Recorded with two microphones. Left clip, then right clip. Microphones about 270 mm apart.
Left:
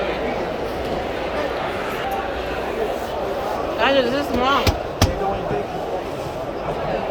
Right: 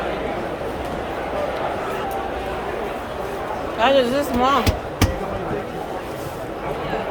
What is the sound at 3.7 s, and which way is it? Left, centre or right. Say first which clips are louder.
Speech: right 2 dB; centre.